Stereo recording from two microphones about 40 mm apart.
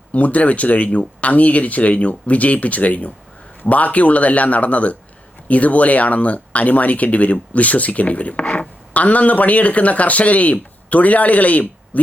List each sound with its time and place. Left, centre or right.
0.1 s speech: left